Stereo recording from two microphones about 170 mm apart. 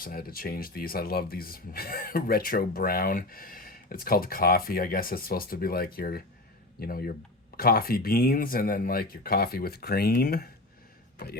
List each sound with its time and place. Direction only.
0.0 s speech: 60° left (ahead or behind)